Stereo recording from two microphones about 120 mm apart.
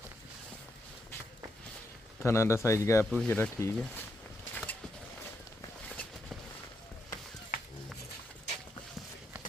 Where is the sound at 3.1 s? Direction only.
15° left (ahead or behind).